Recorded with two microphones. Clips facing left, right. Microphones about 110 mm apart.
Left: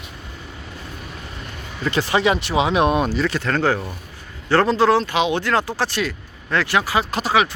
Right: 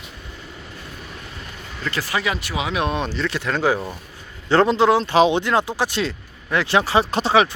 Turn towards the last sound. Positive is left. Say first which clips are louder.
# right 2 dB
turn(degrees=-30)  # may be behind; listen again after turning